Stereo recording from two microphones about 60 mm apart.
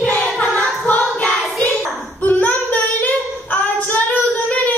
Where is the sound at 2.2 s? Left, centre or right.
Left.